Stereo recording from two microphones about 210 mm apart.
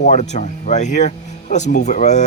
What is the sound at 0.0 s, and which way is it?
A man's voice, 35° left (ahead or behind).